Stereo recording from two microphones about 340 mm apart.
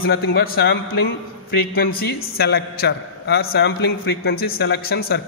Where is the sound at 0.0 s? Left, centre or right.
Left.